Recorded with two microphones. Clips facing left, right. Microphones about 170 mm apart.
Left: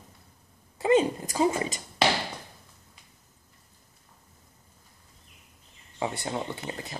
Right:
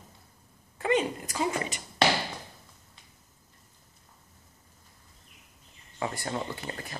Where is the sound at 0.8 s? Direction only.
30° left (ahead or behind).